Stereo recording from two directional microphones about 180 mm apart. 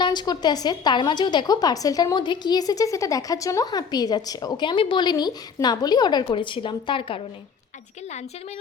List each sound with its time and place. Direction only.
0.0 s a woman's voice: 25° left (ahead or behind)